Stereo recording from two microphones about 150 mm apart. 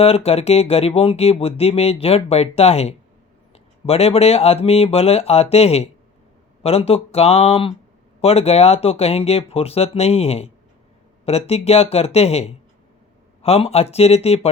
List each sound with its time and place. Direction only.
0.0 s speech: 40° left (ahead or behind)